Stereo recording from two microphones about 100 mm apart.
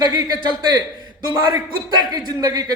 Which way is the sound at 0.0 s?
45° right (ahead or behind).